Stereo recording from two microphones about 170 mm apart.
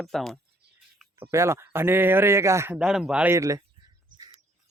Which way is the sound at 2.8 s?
5° right (ahead or behind).